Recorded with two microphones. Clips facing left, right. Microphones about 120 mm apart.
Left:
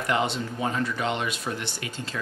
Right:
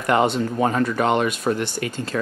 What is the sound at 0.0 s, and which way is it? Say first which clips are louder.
Speech: right 7 dB; 50° right (ahead or behind).